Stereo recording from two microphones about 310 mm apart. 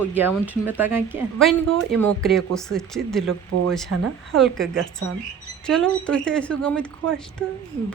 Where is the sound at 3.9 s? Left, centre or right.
Right.